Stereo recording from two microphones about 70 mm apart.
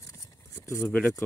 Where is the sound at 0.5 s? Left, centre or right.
Left.